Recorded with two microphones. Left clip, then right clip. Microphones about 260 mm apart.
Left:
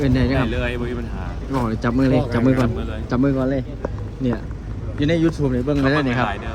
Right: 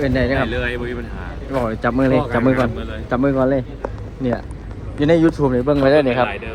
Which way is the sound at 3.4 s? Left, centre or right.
Right.